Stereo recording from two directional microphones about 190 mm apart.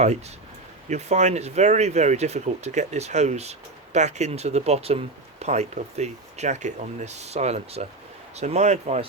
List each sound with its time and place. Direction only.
0.9 s speech: 35° right (ahead or behind)